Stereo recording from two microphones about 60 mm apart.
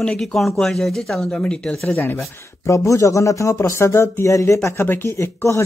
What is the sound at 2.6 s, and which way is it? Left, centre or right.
Speech, left.